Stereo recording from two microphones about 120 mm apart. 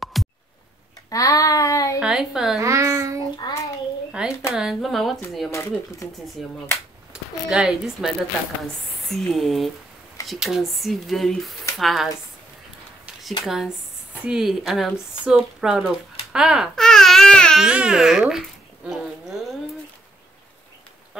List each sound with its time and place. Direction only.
0.0 s a sound: centre (ahead or behind)
1.1 s a sound: 30° left (ahead or behind)
2.0 s speech: 5° right (ahead or behind)
2.6 s child singing: 25° right (ahead or behind)
3.4 s child singing: 35° left (ahead or behind)
4.1 s a sound: 5° right (ahead or behind)
4.6 s speech: centre (ahead or behind)
5.5 s speech: 25° left (ahead or behind)
6.4 s speech: centre (ahead or behind)
9.1 s speech: centre (ahead or behind)
13.5 s speech: 5° right (ahead or behind)
16.7 s babbling: 5° left (ahead or behind)
17.6 s speech: 5° right (ahead or behind)
18.9 s a sound: 5° right (ahead or behind)